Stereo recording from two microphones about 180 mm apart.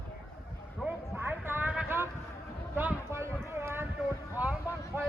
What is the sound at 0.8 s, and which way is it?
Clip-clop, 10° right (ahead or behind).